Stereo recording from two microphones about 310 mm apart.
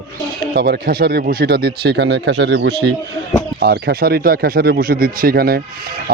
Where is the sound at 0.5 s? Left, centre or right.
Right.